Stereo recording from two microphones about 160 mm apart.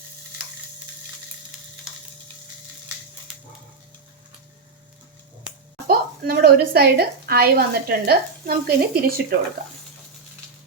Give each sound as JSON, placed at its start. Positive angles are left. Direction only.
{"t": 3.3, "sound": "dog", "side_deg": -5}
{"t": 5.9, "sound": "a woman's voice", "side_deg": -75}